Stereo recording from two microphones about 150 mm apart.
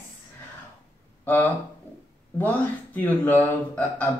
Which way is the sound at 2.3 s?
10° left (ahead or behind).